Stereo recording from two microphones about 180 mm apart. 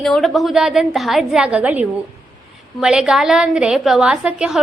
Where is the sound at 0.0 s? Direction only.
Centre (ahead or behind).